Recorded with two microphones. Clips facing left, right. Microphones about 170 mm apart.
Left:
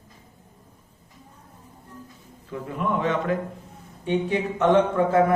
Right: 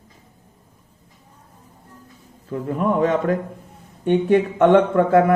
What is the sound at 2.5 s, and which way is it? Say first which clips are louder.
Speech: right 6 dB; 40° right (ahead or behind).